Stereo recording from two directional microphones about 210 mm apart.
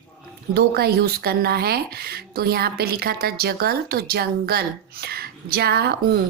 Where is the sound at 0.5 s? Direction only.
50° right (ahead or behind).